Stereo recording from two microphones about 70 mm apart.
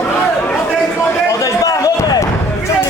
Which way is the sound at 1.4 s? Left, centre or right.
Left.